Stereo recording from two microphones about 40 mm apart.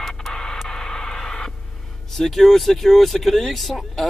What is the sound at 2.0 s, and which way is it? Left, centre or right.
Speech, centre.